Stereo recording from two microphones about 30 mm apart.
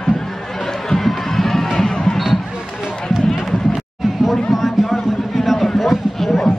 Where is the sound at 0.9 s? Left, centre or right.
Centre.